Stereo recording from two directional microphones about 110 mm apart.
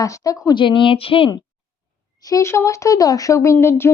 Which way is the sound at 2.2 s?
30° left (ahead or behind).